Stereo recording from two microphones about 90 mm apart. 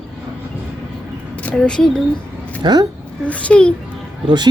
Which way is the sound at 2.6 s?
55° right (ahead or behind).